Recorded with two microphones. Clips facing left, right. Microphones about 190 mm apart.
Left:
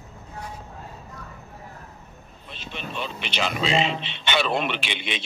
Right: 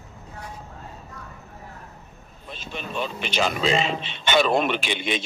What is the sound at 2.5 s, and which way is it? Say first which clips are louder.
Speech: right 2 dB; 45° right (ahead or behind).